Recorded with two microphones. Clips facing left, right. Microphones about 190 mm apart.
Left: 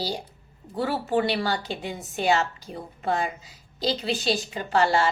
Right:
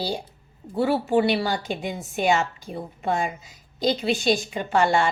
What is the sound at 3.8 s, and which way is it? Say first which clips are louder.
A woman's voice: right 4 dB; 35° left (ahead or behind).